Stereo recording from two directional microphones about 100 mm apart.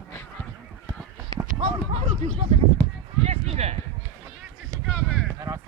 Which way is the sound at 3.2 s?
90° right.